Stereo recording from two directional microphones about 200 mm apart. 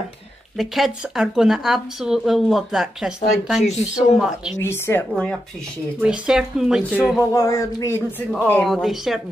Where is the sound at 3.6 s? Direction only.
35° left (ahead or behind).